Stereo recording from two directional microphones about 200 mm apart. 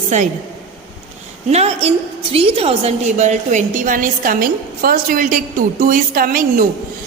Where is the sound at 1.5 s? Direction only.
30° right (ahead or behind).